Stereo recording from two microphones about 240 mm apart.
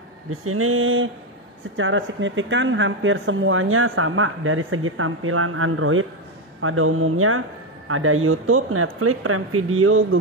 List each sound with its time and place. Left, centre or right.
0.3 s speech: right